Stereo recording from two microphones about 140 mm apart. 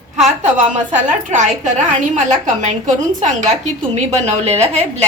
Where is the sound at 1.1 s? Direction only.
60° right (ahead or behind).